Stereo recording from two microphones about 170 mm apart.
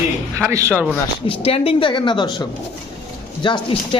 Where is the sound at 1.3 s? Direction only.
35° left (ahead or behind).